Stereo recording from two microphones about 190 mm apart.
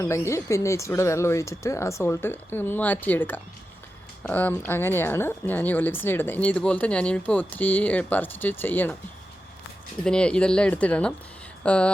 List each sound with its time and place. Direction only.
0.0 s speech: 15° left (ahead or behind)
10.0 s speech: 5° left (ahead or behind)